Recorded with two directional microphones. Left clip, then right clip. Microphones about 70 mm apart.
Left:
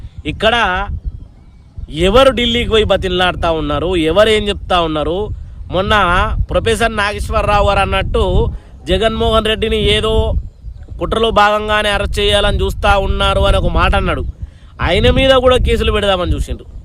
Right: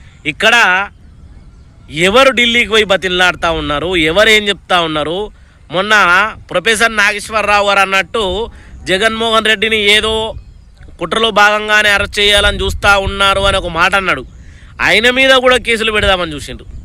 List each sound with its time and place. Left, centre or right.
0.2 s a man's voice: left